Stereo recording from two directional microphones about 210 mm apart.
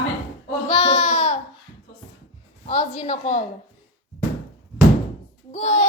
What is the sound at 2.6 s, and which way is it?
Speech, 35° left (ahead or behind).